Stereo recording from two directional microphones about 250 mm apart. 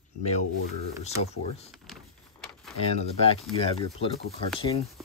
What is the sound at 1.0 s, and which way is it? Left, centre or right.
Speech, left.